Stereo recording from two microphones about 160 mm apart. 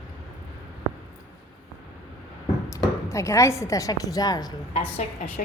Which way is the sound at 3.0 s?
20° left (ahead or behind).